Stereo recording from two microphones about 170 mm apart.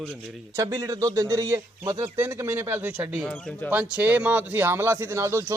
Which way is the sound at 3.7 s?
10° right (ahead or behind).